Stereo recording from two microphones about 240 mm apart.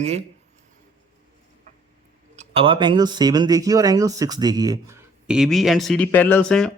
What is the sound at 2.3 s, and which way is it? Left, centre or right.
Speech, right.